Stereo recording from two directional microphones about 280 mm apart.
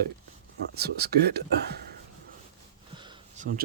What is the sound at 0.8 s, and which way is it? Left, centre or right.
Speech, right.